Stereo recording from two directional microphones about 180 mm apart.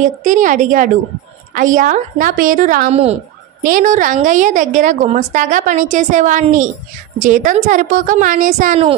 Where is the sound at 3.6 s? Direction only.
45° right (ahead or behind).